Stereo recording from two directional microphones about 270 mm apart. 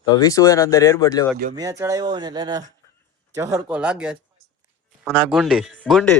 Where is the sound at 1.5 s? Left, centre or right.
Centre.